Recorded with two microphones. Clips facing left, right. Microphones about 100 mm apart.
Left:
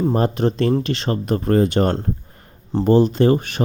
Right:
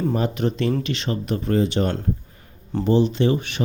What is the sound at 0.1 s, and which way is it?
A man's voice, 40° left (ahead or behind).